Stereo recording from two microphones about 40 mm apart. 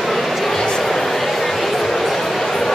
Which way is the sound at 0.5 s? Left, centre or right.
Centre.